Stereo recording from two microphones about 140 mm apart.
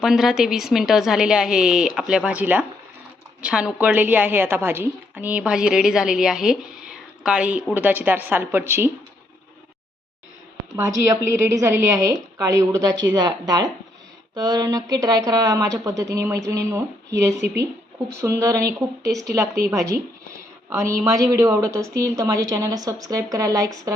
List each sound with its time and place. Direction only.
0.0 s a woman's voice: 5° right (ahead or behind)
10.8 s a woman's voice: 25° right (ahead or behind)